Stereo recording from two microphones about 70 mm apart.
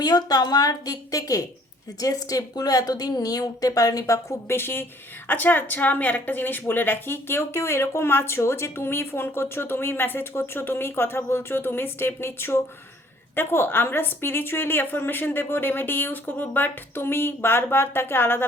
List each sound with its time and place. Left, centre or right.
0.0 s a woman's voice: left